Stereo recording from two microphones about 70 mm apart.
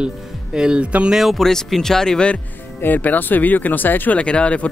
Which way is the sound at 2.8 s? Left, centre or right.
Left.